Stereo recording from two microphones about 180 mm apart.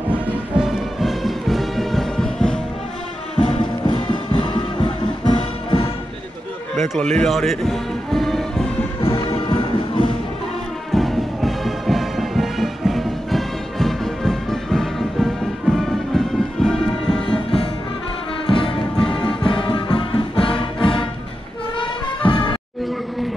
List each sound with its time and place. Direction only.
0.1 s music: 5° right (ahead or behind)
3.3 s music: 35° left (ahead or behind)
7.0 s music: 5° left (ahead or behind)
9.0 s music: 30° left (ahead or behind)
10.9 s music: centre (ahead or behind)
16.6 s music: 5° left (ahead or behind)
18.5 s music: 30° left (ahead or behind)
21.7 s music: 25° left (ahead or behind)